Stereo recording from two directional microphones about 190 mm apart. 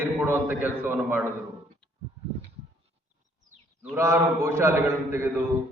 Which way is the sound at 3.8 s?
10° right (ahead or behind).